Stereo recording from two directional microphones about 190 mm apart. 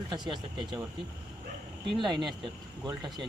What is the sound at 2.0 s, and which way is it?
Speech, 25° right (ahead or behind).